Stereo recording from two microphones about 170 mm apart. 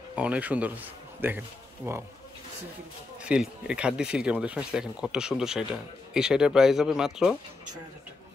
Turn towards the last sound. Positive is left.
turn(degrees=0)  # may be behind; listen again after turning